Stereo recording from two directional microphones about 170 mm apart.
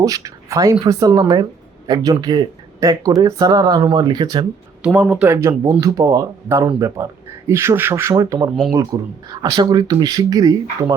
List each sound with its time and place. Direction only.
0.0 s speech: 20° right (ahead or behind)
4.9 s speech: 10° right (ahead or behind)